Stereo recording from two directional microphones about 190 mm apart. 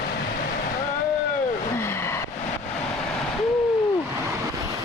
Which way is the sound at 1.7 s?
15° left (ahead or behind).